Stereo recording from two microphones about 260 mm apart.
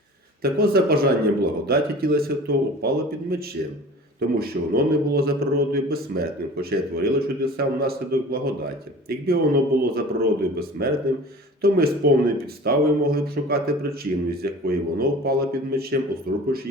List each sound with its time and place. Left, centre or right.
0.4 s speech: right